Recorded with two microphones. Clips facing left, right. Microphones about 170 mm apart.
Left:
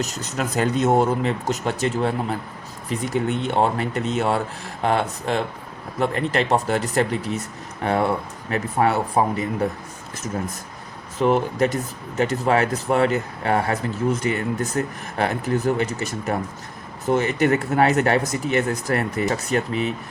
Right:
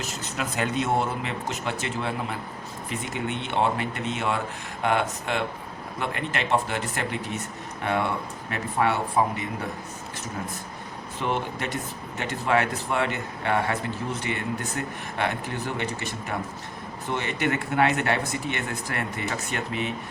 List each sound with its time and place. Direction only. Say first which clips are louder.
0.0 s speech: left 5 dB; 40° left (ahead or behind)
11.2 s speech: left 10 dB; 40° left (ahead or behind)